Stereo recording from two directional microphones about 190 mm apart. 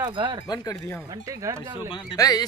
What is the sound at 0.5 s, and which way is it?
Speech, 15° left (ahead or behind).